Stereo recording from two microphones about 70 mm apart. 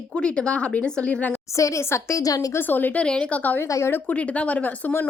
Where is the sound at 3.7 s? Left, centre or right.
Left.